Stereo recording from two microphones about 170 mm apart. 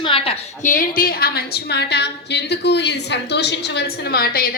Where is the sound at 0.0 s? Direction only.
30° left (ahead or behind).